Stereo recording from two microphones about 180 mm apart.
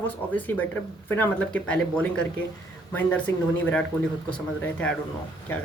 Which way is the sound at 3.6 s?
5° left (ahead or behind).